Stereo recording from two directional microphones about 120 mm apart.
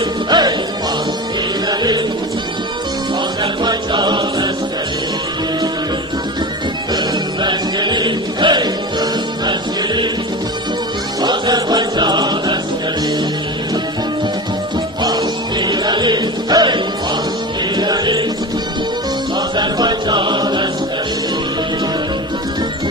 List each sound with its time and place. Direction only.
0.3 s music: 35° right (ahead or behind)
1.7 s music: 35° right (ahead or behind)
3.6 s music: 40° right (ahead or behind)
7.4 s music: 40° right (ahead or behind)
11.1 s music: 35° right (ahead or behind)
15.0 s music: 35° right (ahead or behind)
19.3 s music: 40° right (ahead or behind)